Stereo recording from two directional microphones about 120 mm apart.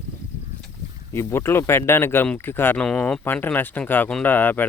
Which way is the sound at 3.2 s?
15° left (ahead or behind).